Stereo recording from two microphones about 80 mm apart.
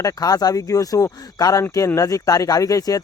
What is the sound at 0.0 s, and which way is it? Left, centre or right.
Speech, left.